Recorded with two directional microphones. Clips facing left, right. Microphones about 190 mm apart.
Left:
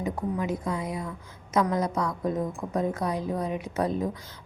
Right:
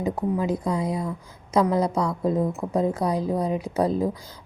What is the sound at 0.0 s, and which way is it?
A woman's voice, 35° right (ahead or behind).